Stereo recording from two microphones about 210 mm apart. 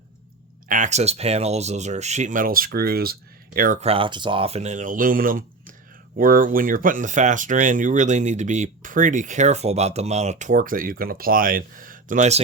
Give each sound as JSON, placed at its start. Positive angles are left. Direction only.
{"t": 0.7, "sound": "speech", "side_deg": -35}